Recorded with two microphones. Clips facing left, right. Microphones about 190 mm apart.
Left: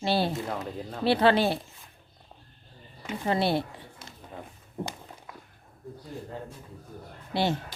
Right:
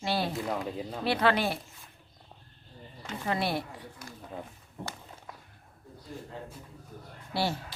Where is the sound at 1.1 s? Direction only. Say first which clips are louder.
Left 5 dB; 30° left (ahead or behind).